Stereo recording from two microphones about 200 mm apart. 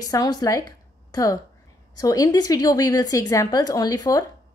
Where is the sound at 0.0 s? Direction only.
20° left (ahead or behind).